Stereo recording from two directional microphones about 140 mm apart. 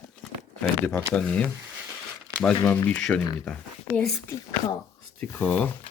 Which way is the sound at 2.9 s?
10° left (ahead or behind).